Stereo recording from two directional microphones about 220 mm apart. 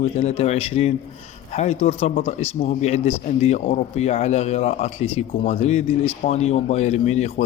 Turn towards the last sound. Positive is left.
turn(degrees=30)  # may be behind; listen again after turning